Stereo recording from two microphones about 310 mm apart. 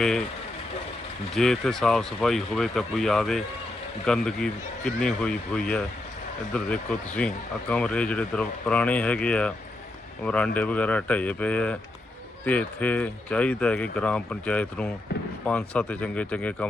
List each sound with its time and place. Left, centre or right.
0.0 s speech: centre
1.3 s speech: centre